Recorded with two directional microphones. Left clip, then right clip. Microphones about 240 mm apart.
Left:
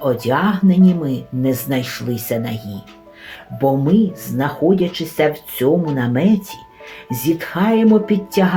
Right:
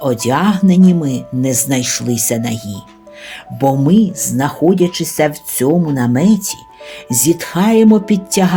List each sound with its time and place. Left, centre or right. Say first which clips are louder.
0.0 s speech: right 2 dB; right